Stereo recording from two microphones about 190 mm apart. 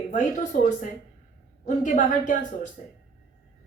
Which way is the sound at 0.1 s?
45° left (ahead or behind).